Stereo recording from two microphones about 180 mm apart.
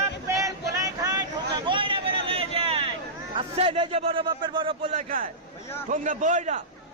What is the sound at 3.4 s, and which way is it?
A man's voice, 35° right (ahead or behind).